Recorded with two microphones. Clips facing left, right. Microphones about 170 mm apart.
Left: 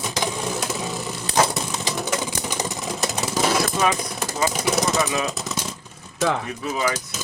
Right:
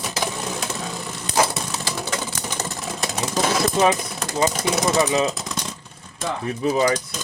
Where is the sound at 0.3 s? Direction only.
10° left (ahead or behind).